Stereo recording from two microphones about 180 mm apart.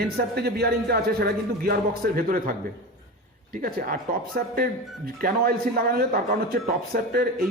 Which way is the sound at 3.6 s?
55° right (ahead or behind).